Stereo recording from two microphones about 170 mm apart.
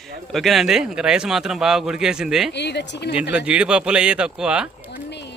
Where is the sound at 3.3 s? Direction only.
5° right (ahead or behind).